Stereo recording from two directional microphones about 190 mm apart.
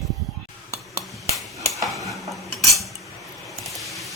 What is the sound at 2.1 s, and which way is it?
Cutlery, centre (ahead or behind).